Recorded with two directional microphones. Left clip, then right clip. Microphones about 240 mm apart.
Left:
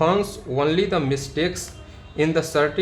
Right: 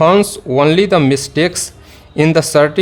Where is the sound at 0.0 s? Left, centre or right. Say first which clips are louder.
Right 10 dB; right.